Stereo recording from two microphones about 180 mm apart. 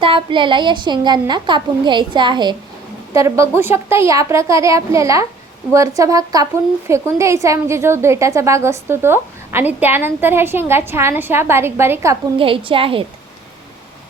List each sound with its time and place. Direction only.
0.0 s a woman's voice: 30° right (ahead or behind)
12.4 s speech: 30° right (ahead or behind)